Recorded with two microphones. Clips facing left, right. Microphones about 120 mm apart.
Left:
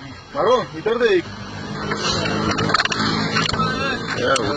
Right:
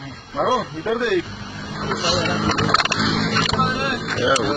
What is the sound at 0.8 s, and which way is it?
Speech, 80° left.